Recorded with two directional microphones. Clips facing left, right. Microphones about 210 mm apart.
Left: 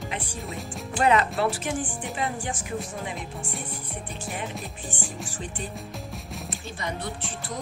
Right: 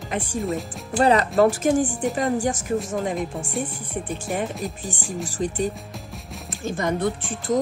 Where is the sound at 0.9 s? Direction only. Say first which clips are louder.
Right 5 dB; 35° right (ahead or behind).